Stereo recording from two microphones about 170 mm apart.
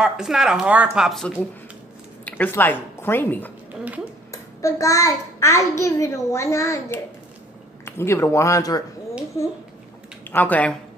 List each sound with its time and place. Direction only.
0.0 s speech: 5° right (ahead or behind)
2.2 s a woman's voice: 10° left (ahead or behind)
3.8 s speech: 10° right (ahead or behind)
4.3 s a child's voice: 20° left (ahead or behind)
10.3 s a child's voice: 10° left (ahead or behind)